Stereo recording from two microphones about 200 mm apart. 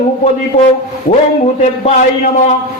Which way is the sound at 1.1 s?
35° left (ahead or behind).